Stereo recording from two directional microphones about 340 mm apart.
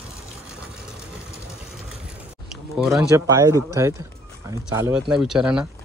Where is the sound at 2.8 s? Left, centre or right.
Centre.